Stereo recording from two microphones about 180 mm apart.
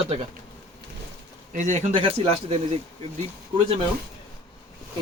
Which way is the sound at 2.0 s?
35° right (ahead or behind).